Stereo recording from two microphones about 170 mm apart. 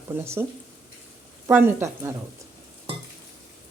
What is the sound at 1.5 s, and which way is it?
Speech, 15° right (ahead or behind).